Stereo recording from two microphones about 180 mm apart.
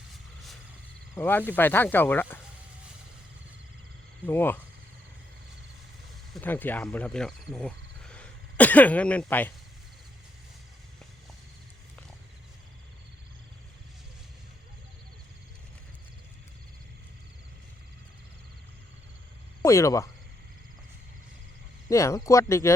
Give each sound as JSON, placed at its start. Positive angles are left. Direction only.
{"t": 1.1, "sound": "speech", "side_deg": 10}
{"t": 4.3, "sound": "speech", "side_deg": 10}
{"t": 6.3, "sound": "speech", "side_deg": 10}
{"t": 19.6, "sound": "speech", "side_deg": 15}
{"t": 21.8, "sound": "speech", "side_deg": 15}